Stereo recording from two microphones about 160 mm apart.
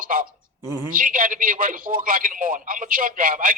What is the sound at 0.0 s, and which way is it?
A man's voice, 60° right (ahead or behind).